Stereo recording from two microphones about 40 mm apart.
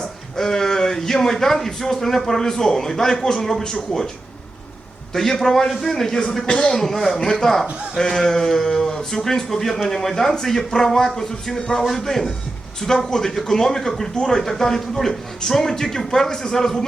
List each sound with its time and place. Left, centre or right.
0.0 s speech: centre
5.1 s speech: centre
6.4 s a man's voice: left
6.7 s speech: centre